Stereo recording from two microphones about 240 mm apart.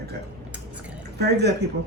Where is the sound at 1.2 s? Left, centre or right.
Right.